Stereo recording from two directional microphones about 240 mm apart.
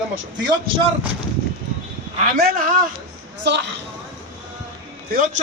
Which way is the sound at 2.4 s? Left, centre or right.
Right.